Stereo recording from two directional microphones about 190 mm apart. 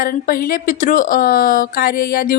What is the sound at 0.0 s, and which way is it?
A woman's voice, 50° left (ahead or behind).